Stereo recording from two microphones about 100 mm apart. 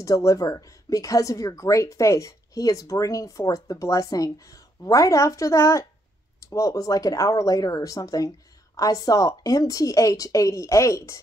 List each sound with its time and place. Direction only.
0.0 s a woman's voice: 35° left (ahead or behind)